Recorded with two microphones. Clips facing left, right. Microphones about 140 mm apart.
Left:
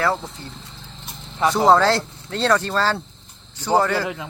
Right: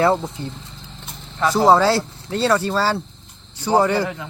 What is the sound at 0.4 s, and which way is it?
Speech, 20° right (ahead or behind).